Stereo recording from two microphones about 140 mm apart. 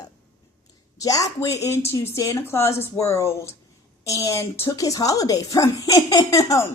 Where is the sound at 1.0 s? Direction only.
25° left (ahead or behind).